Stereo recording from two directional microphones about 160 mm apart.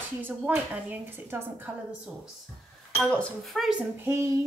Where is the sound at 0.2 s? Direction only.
10° right (ahead or behind).